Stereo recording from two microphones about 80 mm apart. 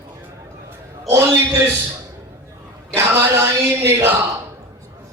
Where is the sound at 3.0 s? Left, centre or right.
Right.